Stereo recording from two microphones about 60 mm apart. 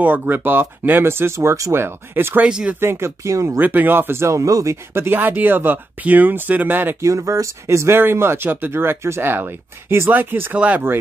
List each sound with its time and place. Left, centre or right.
0.0 s speech: right
2.4 s speech: centre
2.8 s speech: right
3.3 s speech: right
3.5 s speech: right
4.9 s speech: right
7.0 s speech: right
8.0 s speech: right
8.7 s speech: right
10.5 s speech: right